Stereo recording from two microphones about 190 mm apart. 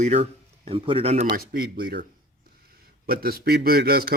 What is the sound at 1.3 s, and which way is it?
A man's voice, 50° right (ahead or behind).